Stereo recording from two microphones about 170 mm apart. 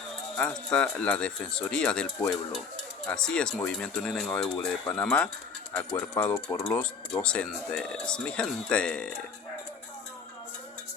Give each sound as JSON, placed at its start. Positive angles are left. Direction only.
{"t": 0.3, "sound": "speech", "side_deg": 5}
{"t": 7.1, "sound": "speech", "side_deg": 5}